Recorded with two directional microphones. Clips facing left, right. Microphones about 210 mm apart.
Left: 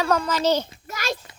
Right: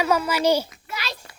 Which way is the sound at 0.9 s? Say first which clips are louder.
Left 5 dB; 45° left (ahead or behind).